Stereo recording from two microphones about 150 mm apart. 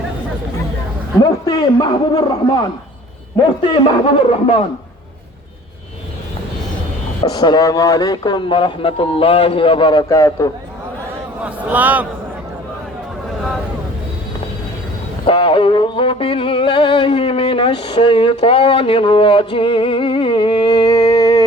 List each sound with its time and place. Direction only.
1.2 s speech: 25° left (ahead or behind)
4.0 s music: 35° left (ahead or behind)
7.3 s speech: 25° left (ahead or behind)
11.4 s a man's voice: 10° right (ahead or behind)
15.3 s music: 35° left (ahead or behind)